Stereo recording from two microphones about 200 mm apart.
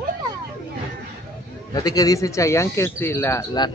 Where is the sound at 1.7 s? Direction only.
20° left (ahead or behind).